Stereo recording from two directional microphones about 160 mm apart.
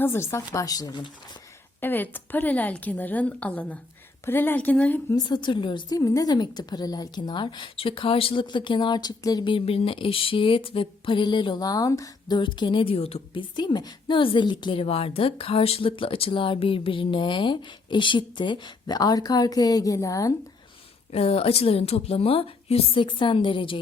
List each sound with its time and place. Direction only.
0.0 s speech: 15° left (ahead or behind)
1.8 s a woman's voice: 10° left (ahead or behind)
5.1 s a woman's voice: 25° left (ahead or behind)
21.1 s a woman's voice: 40° left (ahead or behind)